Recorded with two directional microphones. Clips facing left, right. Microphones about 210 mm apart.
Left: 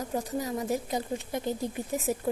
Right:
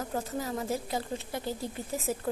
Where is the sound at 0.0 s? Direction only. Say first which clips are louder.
Left 2 dB; 15° left (ahead or behind).